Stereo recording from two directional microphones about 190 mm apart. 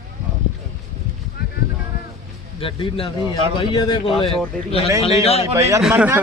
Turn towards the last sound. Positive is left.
turn(degrees=-10)  # may be behind; listen again after turning